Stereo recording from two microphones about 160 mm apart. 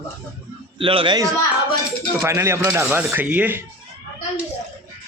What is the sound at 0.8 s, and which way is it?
Speech, 35° right (ahead or behind).